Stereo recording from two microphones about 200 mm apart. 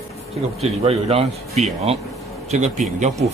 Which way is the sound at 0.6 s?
30° right (ahead or behind).